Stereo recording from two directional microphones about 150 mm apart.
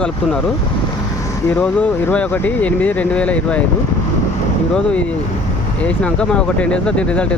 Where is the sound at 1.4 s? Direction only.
20° left (ahead or behind).